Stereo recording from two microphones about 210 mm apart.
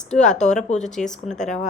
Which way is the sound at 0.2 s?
35° left (ahead or behind).